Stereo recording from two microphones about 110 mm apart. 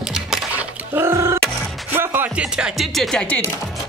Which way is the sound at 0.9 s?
20° right (ahead or behind).